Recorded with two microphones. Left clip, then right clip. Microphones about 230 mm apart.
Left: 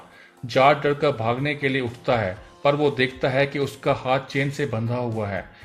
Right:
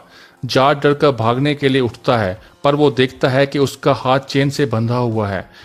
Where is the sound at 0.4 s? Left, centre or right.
Right.